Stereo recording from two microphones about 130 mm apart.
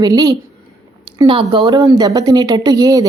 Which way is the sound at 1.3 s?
40° right (ahead or behind).